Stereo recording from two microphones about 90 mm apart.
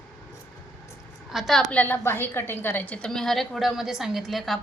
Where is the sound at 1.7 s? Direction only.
20° left (ahead or behind).